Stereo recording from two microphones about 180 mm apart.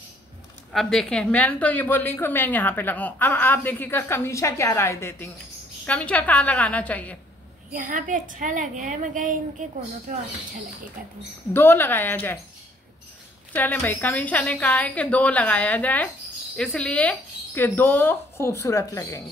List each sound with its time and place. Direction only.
0.7 s a woman's voice: 5° left (ahead or behind)
7.7 s a woman's voice: 45° right (ahead or behind)
11.5 s a woman's voice: 10° left (ahead or behind)
13.6 s a woman's voice: 10° left (ahead or behind)